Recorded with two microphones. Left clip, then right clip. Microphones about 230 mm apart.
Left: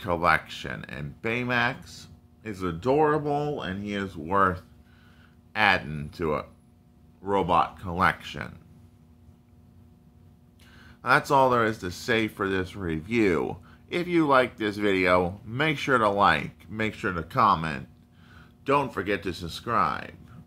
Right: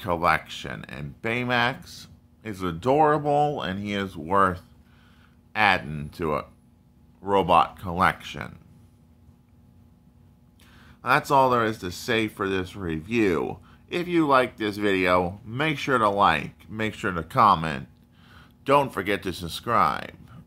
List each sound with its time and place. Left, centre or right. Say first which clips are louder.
0.0 s speech: right 1 dB; centre
10.8 s speech: even; centre